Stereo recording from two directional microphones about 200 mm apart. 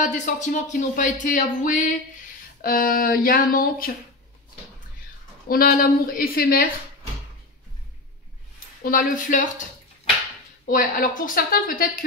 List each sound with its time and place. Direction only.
0.0 s speech: 40° left (ahead or behind)
5.5 s speech: 45° left (ahead or behind)
8.8 s speech: 45° left (ahead or behind)
10.6 s speech: 45° left (ahead or behind)